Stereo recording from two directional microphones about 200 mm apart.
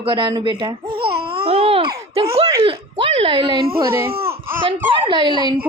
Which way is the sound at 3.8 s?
10° right (ahead or behind).